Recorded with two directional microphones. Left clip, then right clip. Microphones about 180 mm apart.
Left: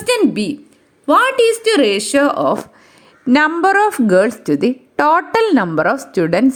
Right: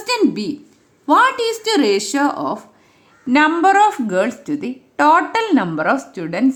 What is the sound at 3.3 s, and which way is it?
A woman's voice, 35° left (ahead or behind).